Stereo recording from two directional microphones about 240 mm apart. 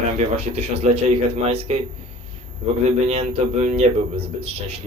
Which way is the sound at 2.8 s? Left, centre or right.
Right.